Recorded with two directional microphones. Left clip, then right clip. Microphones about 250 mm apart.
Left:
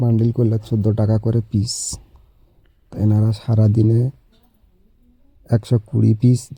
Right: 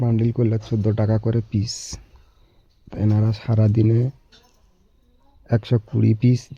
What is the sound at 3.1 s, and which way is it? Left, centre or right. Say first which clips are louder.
Speech: left 2 dB; centre.